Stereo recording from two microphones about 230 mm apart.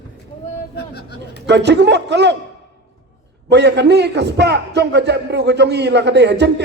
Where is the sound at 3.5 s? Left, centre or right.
Right.